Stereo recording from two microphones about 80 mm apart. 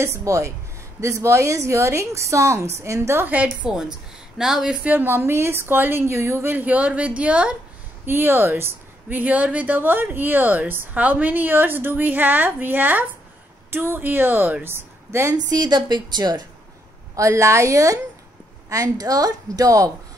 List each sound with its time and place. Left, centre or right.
0.0 s a woman's voice: right
3.6 s speech: centre
4.8 s speech: right
8.0 s speech: right
15.3 s a woman's voice: right
17.1 s a woman's voice: right